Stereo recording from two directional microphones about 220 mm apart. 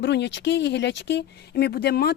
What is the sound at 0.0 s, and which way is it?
Speech, 55° left (ahead or behind).